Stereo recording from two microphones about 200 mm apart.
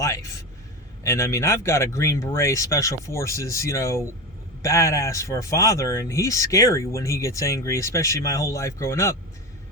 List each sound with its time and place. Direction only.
0.0 s speech: 15° left (ahead or behind)